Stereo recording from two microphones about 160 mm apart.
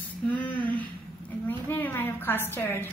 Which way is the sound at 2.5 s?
15° left (ahead or behind).